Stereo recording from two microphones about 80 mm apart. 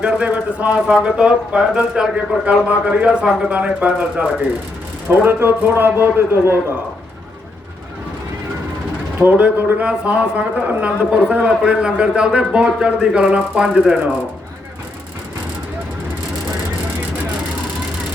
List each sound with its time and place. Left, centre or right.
0.0 s speech: centre
5.0 s a man's voice: right
9.2 s speech: right